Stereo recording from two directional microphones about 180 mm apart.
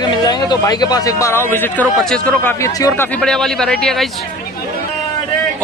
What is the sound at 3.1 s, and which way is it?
Speech, 5° left (ahead or behind).